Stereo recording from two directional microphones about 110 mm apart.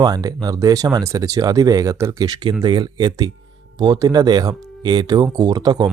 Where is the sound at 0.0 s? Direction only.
35° right (ahead or behind).